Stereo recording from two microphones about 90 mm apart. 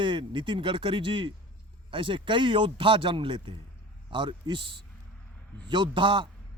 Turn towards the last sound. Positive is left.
turn(degrees=-65)  # may be behind; listen again after turning